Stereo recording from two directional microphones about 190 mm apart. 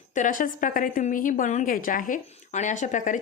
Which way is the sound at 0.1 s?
45° left (ahead or behind).